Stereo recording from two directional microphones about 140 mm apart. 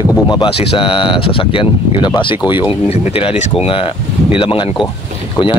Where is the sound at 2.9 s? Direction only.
45° left (ahead or behind).